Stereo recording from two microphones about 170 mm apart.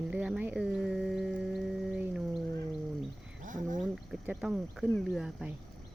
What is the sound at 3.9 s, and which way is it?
Speech, centre (ahead or behind).